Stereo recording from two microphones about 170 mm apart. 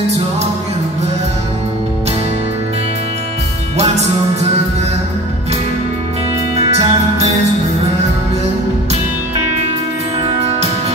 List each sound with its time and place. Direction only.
6.5 s music: 35° right (ahead or behind)